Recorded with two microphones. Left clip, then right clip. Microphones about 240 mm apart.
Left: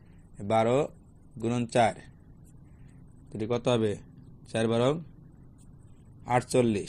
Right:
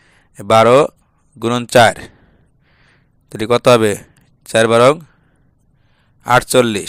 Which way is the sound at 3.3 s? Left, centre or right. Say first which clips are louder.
Right 17 dB; right.